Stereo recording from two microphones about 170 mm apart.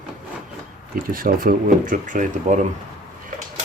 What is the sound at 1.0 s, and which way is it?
Speech, 55° right (ahead or behind).